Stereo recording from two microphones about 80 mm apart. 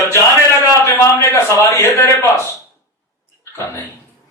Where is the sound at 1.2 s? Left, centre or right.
Left.